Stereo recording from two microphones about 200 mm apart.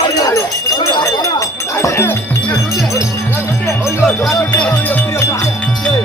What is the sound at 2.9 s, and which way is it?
Music, 15° left (ahead or behind).